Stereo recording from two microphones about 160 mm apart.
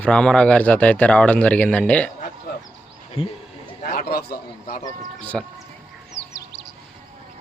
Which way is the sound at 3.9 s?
70° left (ahead or behind).